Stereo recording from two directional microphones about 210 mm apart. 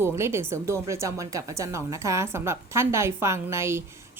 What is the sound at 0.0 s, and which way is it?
Speech, 10° right (ahead or behind).